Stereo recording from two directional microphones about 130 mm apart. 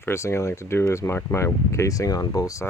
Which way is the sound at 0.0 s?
20° left (ahead or behind).